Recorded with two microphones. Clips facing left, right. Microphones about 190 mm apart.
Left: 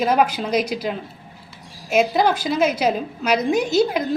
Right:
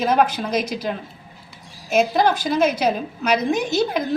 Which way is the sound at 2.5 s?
50° right (ahead or behind).